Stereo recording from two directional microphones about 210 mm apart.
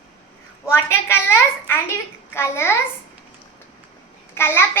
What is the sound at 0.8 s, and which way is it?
A child's voice, 10° left (ahead or behind).